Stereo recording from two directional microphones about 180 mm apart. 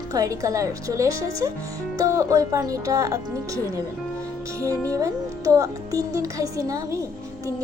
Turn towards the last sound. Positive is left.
turn(degrees=-20)  # may be behind; listen again after turning